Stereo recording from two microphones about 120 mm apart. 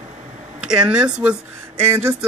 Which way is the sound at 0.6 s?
5° right (ahead or behind).